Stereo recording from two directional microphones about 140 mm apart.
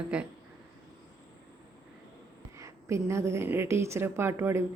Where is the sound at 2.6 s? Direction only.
20° right (ahead or behind).